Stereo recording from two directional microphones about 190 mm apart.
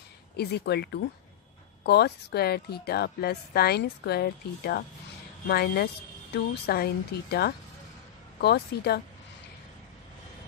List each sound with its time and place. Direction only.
0.4 s a woman's voice: 60° left (ahead or behind)